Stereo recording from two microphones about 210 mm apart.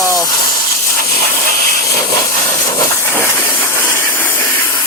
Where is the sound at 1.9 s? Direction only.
15° left (ahead or behind).